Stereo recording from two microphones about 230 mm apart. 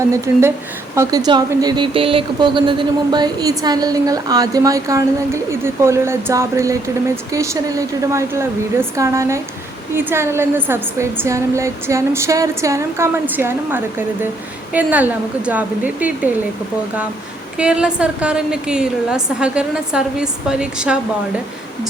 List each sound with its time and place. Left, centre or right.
0.0 s speech: centre
17.6 s a woman's voice: centre